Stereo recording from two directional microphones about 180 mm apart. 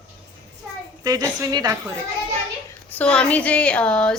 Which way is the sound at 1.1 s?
20° right (ahead or behind).